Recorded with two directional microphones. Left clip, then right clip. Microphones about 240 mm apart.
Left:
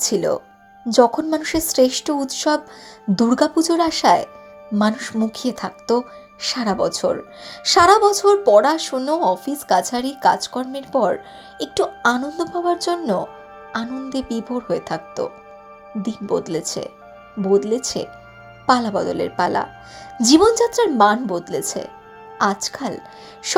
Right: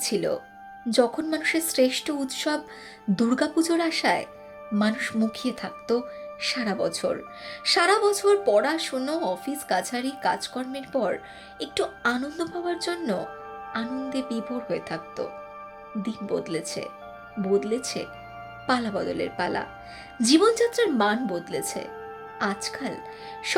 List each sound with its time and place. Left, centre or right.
0.0 s speech: centre
5.5 s speech: centre
5.9 s speech: centre